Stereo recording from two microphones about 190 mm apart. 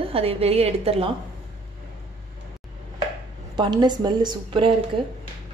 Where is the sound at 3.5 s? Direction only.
25° right (ahead or behind).